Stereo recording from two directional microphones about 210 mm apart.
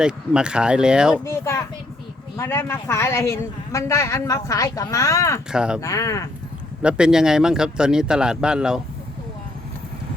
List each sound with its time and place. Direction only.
0.0 s speech: 5° right (ahead or behind)
1.2 s speech: 15° left (ahead or behind)
5.5 s speech: 5° right (ahead or behind)
5.8 s speech: 15° left (ahead or behind)
6.8 s speech: 5° right (ahead or behind)